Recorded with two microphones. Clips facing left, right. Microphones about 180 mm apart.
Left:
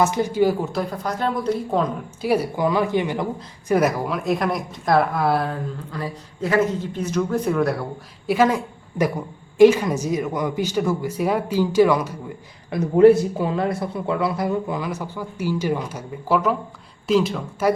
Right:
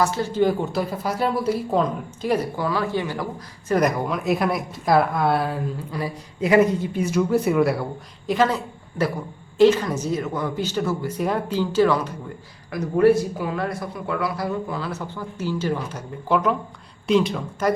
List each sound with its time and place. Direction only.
0.0 s speech: 15° left (ahead or behind)
0.6 s speech: centre (ahead or behind); by 3.2 s 20° left (ahead or behind)
3.7 s a woman's voice: 5° left (ahead or behind)
8.3 s speech: 10° left (ahead or behind)
12.7 s a woman's voice: 25° left (ahead or behind); by 17.7 s centre (ahead or behind)